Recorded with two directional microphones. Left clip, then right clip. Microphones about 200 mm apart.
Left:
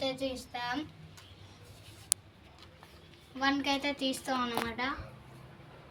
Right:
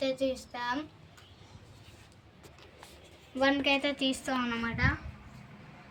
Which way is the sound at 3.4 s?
20° right (ahead or behind).